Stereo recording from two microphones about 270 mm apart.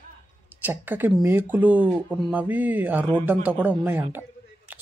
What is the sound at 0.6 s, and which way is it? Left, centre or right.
Speech, centre.